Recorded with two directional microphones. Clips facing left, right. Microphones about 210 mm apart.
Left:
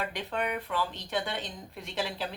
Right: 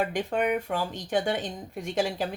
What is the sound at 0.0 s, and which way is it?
A woman's voice, 45° right (ahead or behind).